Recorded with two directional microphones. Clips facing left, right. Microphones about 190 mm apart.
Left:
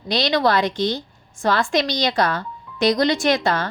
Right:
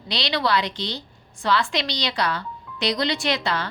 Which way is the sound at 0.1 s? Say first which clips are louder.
Left 5 dB; 45° left (ahead or behind).